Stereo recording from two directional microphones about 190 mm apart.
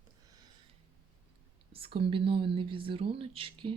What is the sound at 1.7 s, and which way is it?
Speech, 30° right (ahead or behind).